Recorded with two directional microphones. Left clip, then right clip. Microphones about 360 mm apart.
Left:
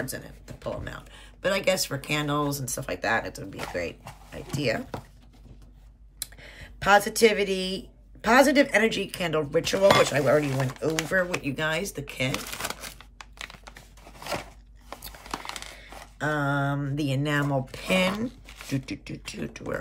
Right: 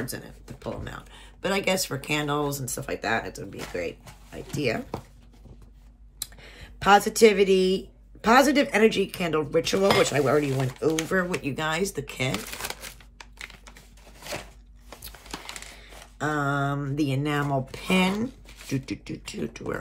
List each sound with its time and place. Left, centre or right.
0.0 s speech: centre
6.1 s speech: centre
15.8 s speech: centre